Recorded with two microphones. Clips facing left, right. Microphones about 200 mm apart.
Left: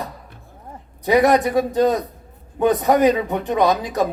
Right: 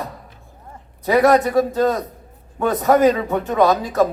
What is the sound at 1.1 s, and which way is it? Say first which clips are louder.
Speech: right 1 dB; 20° left (ahead or behind).